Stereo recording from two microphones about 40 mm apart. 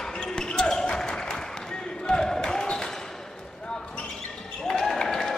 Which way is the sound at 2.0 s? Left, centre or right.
Centre.